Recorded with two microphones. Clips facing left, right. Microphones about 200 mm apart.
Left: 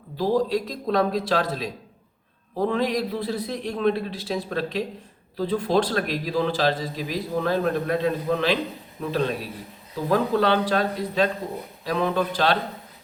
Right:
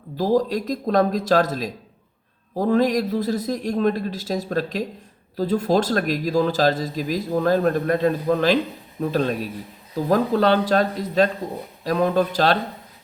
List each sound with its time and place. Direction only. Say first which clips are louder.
0.2 s speech: right 2 dB; 45° right (ahead or behind)